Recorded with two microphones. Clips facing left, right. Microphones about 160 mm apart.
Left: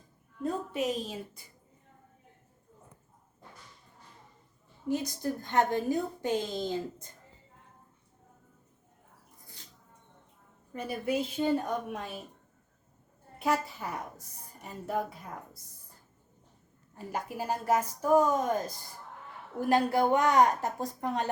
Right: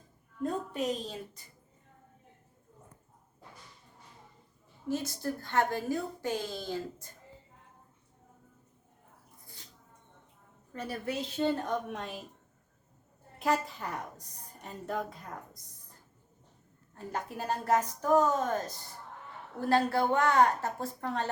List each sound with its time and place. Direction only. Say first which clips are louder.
0.4 s a woman's voice: left 1 dB; 5° left (ahead or behind)
4.9 s a woman's voice: left 2 dB; 15° left (ahead or behind)
10.7 s a woman's voice: left 4 dB; 10° left (ahead or behind)
13.4 s a woman's voice: even; 5° left (ahead or behind)
16.9 s a woman's voice: left 1 dB; 10° left (ahead or behind)